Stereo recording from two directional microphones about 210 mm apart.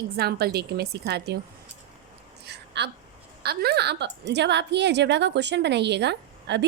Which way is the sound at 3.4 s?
50° right (ahead or behind).